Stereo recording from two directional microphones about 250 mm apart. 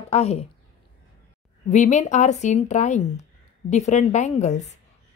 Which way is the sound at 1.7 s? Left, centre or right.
Left.